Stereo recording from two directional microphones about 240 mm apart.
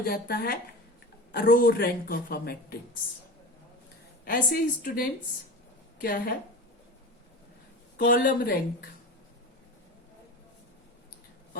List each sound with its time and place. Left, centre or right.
0.0 s a man's voice: left
4.3 s a man's voice: left
7.9 s a man's voice: left